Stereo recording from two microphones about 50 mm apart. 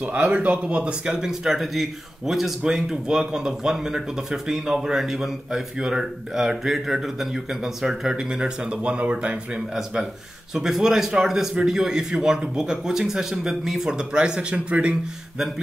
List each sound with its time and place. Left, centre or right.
0.0 s speech: centre
10.5 s speech: centre